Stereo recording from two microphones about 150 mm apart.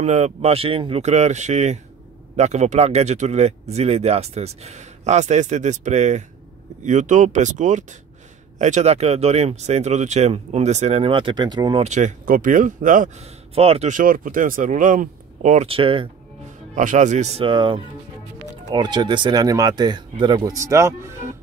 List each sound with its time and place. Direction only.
0.0 s speech: 45° right (ahead or behind); by 11.8 s 30° right (ahead or behind)
11.8 s speech: 50° right (ahead or behind)
15.7 s speech: 35° right (ahead or behind)
16.7 s speech: 55° right (ahead or behind)
17.5 s speech: 35° right (ahead or behind); by 21.4 s 20° right (ahead or behind)